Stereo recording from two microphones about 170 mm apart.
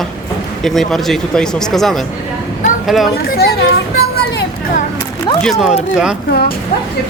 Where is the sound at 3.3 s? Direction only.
65° left (ahead or behind).